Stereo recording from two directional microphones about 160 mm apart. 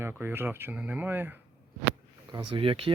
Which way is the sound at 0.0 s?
15° right (ahead or behind).